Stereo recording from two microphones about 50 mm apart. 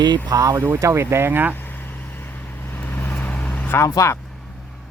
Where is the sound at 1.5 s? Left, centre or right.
Left.